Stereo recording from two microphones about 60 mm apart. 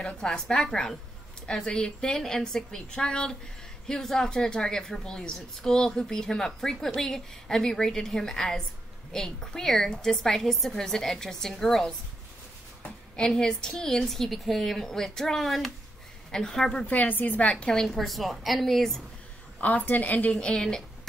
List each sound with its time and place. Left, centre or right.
0.0 s a woman's voice: centre
13.1 s a woman's voice: centre
16.8 s a woman's voice: left
17.7 s a woman's voice: centre
19.6 s a woman's voice: left
20.6 s a sound: centre